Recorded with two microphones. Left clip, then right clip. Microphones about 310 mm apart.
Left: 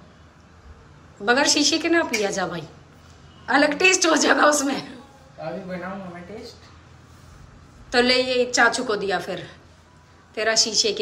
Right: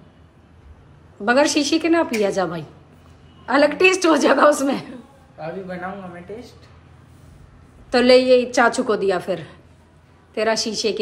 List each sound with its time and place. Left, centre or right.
1.2 s a woman's voice: centre
7.9 s a woman's voice: centre